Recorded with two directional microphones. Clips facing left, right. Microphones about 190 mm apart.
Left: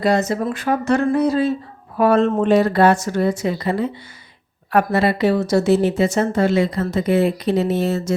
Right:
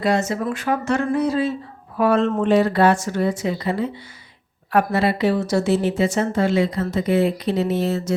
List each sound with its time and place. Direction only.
0.0 s a woman's voice: 35° left (ahead or behind)